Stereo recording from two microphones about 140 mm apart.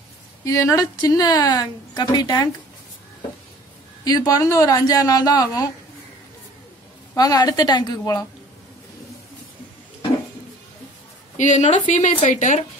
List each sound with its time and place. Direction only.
0.5 s a woman's voice: 25° left (ahead or behind)
4.0 s a woman's voice: 30° left (ahead or behind)
7.2 s a woman's voice: 25° left (ahead or behind)
11.3 s a woman's voice: 60° left (ahead or behind)